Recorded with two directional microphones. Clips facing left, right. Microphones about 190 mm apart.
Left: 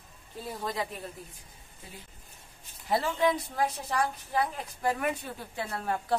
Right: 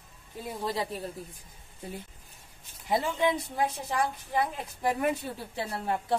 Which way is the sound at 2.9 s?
20° right (ahead or behind).